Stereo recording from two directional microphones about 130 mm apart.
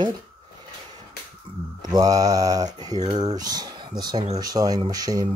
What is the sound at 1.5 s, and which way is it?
Speech, 40° right (ahead or behind).